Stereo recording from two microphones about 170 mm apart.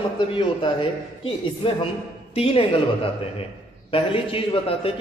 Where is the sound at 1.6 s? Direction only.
30° left (ahead or behind).